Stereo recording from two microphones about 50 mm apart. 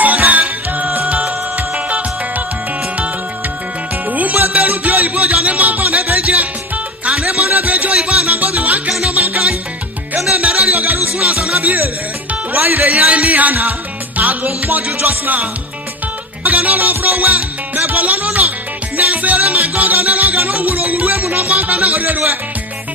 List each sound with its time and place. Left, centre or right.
0.0 s music: right
1.9 s music: right
4.1 s music: right
7.1 s music: centre
7.4 s music: right
7.9 s music: centre
8.5 s music: right
8.9 s music: centre
9.1 s music: right
10.7 s music: right
11.3 s music: centre
11.6 s music: right
16.4 s music: right